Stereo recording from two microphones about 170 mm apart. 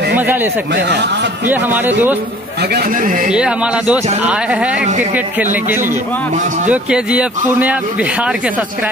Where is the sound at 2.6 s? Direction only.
70° right (ahead or behind); by 3.3 s 50° right (ahead or behind).